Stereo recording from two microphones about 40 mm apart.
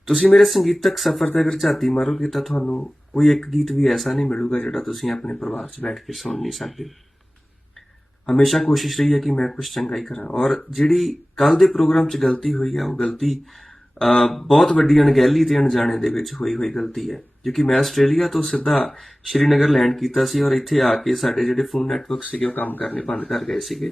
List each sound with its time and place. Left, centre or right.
0.0 s speech: centre
4.3 s speech: left
4.6 s speech: centre
8.4 s speech: centre
22.5 s speech: left
22.8 s speech: left
23.3 s speech: centre